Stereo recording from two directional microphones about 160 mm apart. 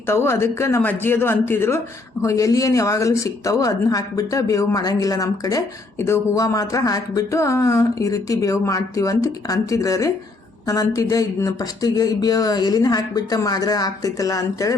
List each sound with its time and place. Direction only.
0.1 s speech: 15° left (ahead or behind)